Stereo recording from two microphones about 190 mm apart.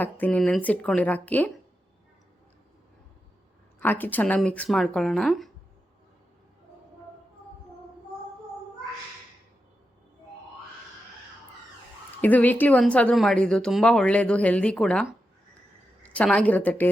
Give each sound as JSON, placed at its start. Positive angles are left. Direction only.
{"t": 0.0, "sound": "a woman's voice", "side_deg": 10}
{"t": 3.8, "sound": "speech", "side_deg": 10}
{"t": 12.2, "sound": "a woman's voice", "side_deg": 10}
{"t": 16.0, "sound": "a woman's voice", "side_deg": 5}